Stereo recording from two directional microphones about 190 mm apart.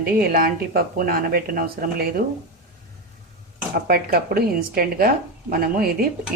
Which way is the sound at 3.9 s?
55° right (ahead or behind).